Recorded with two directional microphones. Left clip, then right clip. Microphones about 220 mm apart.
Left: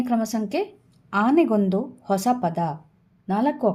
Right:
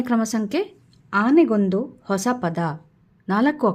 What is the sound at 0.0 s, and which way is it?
A woman's voice, 20° right (ahead or behind).